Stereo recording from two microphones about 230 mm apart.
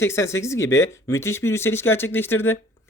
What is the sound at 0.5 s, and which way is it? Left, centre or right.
Speech, left.